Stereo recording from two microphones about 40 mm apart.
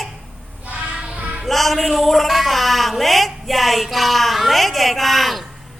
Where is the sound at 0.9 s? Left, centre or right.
Right.